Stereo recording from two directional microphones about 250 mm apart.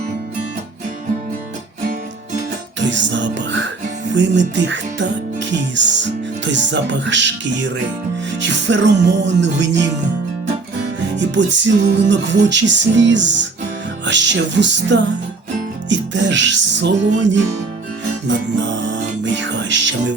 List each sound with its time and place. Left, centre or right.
2.8 s music: right
11.2 s music: right
18.3 s music: right